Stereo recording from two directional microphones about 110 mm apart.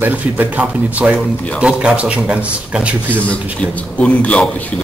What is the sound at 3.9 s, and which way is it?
Speech, 10° left (ahead or behind).